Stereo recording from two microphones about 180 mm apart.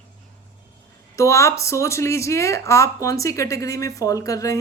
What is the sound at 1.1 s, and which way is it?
Speech, 15° left (ahead or behind).